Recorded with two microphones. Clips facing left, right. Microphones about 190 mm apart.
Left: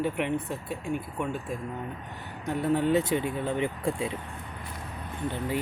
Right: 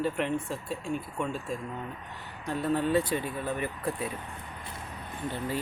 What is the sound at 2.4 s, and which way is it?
Speech, 15° left (ahead or behind).